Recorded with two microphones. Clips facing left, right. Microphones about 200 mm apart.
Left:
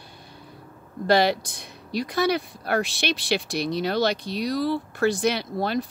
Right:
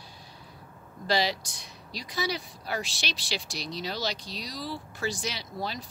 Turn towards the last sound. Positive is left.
turn(degrees=60)  # may be behind; listen again after turning